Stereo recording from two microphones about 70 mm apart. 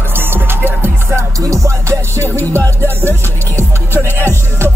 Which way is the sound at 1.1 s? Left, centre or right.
Right.